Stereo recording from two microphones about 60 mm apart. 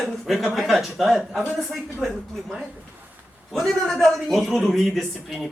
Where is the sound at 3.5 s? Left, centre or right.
Centre.